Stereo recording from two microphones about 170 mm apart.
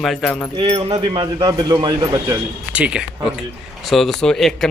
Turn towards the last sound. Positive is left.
turn(degrees=0)  # may be behind; listen again after turning